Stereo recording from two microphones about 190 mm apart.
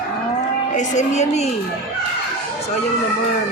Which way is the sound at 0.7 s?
40° left (ahead or behind).